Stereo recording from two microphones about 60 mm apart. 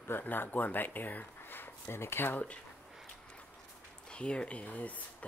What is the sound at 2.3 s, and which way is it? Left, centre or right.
Speech, left.